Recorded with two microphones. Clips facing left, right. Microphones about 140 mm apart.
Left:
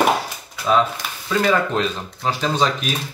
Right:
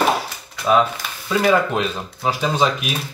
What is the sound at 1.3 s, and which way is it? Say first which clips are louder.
Speech: right 2 dB; 10° right (ahead or behind).